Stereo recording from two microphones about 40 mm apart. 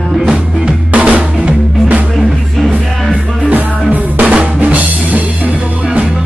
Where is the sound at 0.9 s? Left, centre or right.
Right.